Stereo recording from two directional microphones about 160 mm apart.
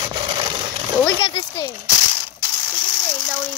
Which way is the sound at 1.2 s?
30° left (ahead or behind).